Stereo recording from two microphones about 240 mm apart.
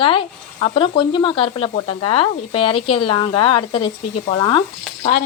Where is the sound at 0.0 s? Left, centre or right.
Left.